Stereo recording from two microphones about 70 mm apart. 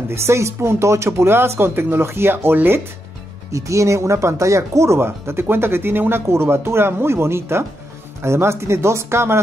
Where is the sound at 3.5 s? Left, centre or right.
Right.